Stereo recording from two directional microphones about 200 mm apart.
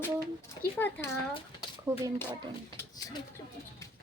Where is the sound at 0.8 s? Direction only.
10° left (ahead or behind).